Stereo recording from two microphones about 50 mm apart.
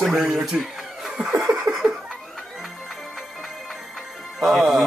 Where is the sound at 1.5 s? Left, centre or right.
Centre.